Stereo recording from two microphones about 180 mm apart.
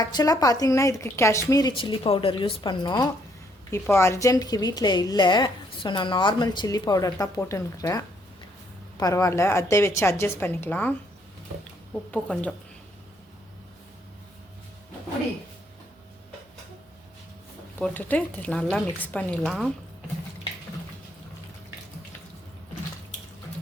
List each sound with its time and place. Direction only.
0.0 s a woman's voice: 20° left (ahead or behind)
3.7 s a woman's voice: 15° left (ahead or behind)
12.1 s a woman's voice: 5° left (ahead or behind)
17.7 s a woman's voice: 10° left (ahead or behind)